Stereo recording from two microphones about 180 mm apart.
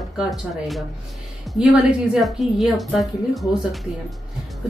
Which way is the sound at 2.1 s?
Centre (ahead or behind).